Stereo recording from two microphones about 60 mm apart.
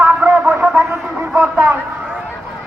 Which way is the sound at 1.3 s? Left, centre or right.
Centre.